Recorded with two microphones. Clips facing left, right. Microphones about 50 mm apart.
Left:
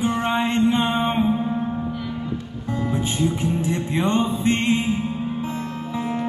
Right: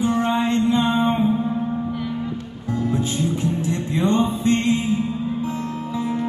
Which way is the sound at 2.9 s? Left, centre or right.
Left.